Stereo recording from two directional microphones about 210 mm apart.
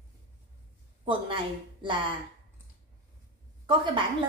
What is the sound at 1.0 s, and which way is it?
A woman's voice, 25° right (ahead or behind).